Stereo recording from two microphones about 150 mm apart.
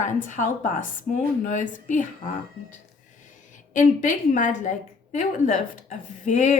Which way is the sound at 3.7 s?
55° left (ahead or behind).